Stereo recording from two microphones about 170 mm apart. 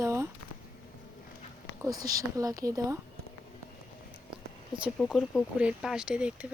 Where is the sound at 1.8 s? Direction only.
20° right (ahead or behind).